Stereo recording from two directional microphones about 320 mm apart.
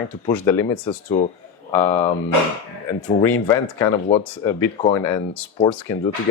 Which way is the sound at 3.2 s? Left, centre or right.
Centre.